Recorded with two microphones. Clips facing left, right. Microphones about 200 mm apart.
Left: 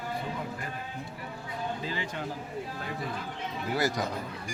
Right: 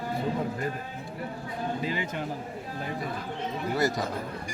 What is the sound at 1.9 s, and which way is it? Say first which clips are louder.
Speech: right 4 dB; 15° right (ahead or behind).